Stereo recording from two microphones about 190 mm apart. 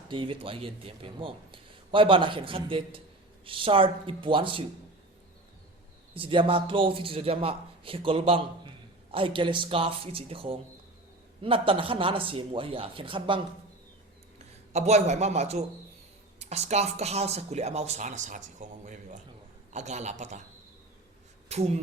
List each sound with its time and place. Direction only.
0.1 s a man's voice: 25° right (ahead or behind)
6.1 s a man's voice: 25° right (ahead or behind)
21.5 s speech: 35° right (ahead or behind)